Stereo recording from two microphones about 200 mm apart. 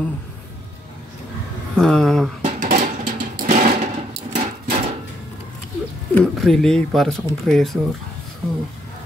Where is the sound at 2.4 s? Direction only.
35° right (ahead or behind).